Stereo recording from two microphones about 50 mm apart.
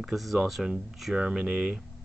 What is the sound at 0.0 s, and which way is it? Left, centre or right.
Speech, centre.